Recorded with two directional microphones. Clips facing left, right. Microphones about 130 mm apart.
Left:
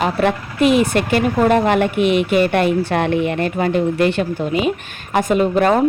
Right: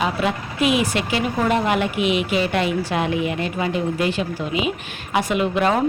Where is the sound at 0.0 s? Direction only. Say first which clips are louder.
Left 5 dB; 55° left (ahead or behind).